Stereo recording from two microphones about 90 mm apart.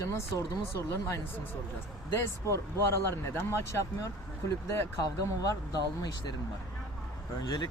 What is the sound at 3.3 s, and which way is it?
Speech, 30° left (ahead or behind).